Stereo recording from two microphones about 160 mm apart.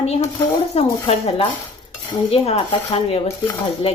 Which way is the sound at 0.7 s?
40° left (ahead or behind).